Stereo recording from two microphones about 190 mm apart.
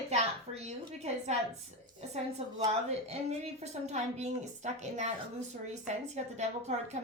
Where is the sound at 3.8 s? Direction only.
35° right (ahead or behind).